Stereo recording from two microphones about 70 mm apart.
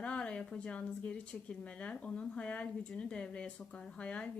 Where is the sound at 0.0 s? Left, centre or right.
Centre.